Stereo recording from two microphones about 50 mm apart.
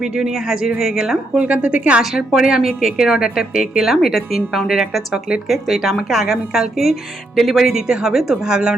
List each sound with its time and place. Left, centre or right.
0.0 s a woman's voice: centre
1.4 s a woman's voice: right
2.0 s a woman's voice: centre
8.4 s a woman's voice: centre